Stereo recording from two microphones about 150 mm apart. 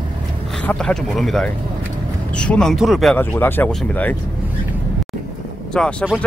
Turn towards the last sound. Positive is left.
turn(degrees=5)  # may be behind; listen again after turning